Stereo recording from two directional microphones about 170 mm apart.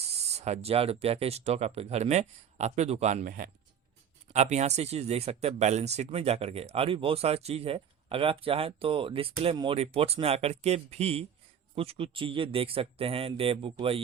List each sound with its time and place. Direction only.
0.1 s speech: 40° right (ahead or behind)
3.2 s speech: 55° right (ahead or behind)
4.3 s speech: 40° right (ahead or behind)